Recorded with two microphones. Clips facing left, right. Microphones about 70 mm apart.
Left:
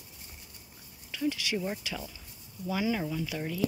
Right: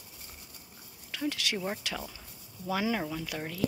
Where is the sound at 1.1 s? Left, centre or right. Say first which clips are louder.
Left 2 dB; right.